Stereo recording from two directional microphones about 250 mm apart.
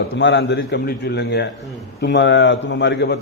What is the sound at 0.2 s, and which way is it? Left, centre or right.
A man's voice, left.